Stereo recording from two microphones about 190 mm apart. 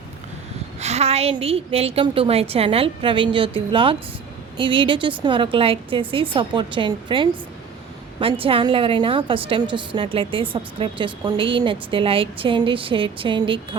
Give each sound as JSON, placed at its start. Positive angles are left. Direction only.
{"t": 0.8, "sound": "a woman's voice", "side_deg": -35}